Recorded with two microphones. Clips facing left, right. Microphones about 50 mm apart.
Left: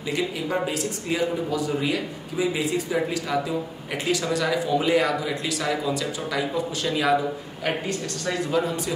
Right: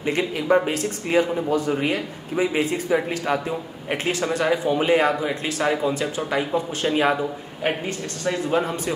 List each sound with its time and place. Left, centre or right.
0.0 s a man's voice: right
8.5 s a man's voice: right